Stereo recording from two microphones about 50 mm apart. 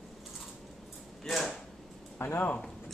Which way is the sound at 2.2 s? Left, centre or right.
Left.